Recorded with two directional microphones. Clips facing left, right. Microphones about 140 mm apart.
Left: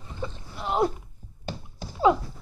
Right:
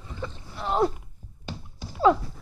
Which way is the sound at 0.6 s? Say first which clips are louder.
Right 1 dB; 10° left (ahead or behind).